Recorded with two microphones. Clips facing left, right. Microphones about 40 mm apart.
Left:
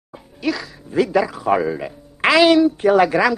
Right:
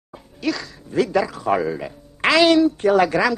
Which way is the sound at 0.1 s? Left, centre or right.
Centre.